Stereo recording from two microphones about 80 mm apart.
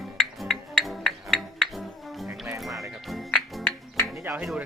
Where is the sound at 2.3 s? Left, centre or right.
Right.